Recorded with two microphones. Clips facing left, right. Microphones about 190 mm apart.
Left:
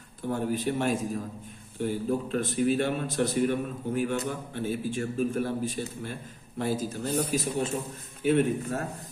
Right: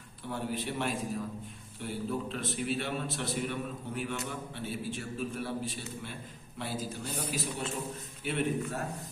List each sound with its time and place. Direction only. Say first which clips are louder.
0.3 s a man's voice: left 7 dB; 45° left (ahead or behind)